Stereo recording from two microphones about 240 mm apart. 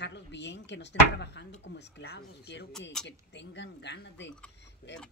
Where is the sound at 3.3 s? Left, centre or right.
Left.